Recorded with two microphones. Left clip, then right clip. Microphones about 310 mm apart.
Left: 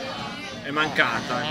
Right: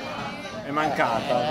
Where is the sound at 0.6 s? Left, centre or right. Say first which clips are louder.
Left 1 dB; left.